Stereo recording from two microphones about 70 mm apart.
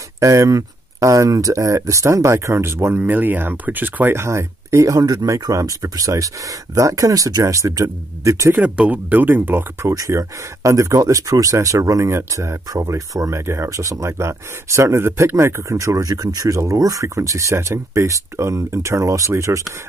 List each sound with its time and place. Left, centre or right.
0.2 s speech: right
8.5 s speech: right
9.8 s speech: right
12.7 s speech: right